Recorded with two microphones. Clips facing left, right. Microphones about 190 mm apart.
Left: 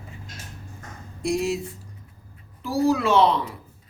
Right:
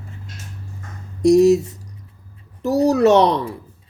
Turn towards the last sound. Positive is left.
turn(degrees=-45)  # may be behind; listen again after turning